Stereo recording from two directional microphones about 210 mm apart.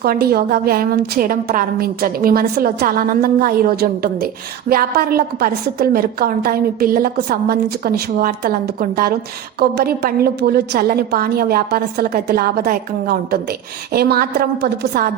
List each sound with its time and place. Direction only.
0.0 s a woman's voice: 45° right (ahead or behind)